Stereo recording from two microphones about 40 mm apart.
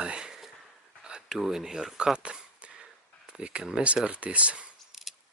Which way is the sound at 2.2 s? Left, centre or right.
Right.